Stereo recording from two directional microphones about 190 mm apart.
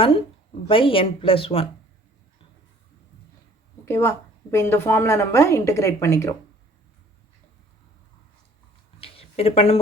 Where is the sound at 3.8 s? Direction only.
15° left (ahead or behind).